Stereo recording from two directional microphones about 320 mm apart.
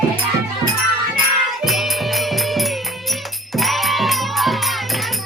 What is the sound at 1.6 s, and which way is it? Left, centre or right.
Music, centre.